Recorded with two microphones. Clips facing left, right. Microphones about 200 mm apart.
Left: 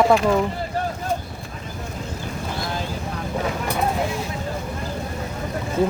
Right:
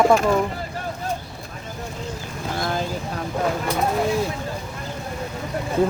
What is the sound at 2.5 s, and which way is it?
Boat, 50° right (ahead or behind).